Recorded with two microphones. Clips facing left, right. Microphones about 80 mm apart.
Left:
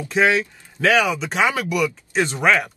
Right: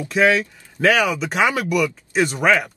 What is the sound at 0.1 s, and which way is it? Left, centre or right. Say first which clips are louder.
Speech: right 1 dB; left.